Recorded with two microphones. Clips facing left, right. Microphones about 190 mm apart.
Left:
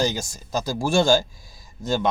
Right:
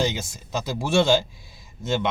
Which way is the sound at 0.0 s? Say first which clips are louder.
Left 1 dB; 40° left (ahead or behind).